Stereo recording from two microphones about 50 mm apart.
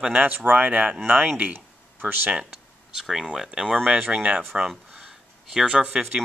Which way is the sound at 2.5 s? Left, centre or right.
Centre.